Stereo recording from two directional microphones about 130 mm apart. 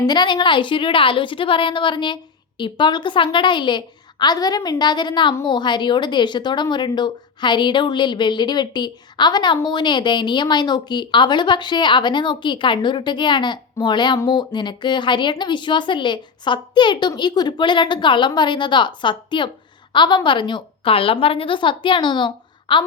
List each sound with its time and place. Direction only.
0.0 s a woman's voice: 35° left (ahead or behind)